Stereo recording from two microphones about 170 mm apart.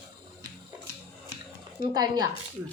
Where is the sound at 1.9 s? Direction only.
25° right (ahead or behind).